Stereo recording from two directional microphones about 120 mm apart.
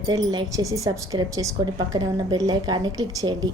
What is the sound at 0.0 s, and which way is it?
A woman's voice, 30° right (ahead or behind).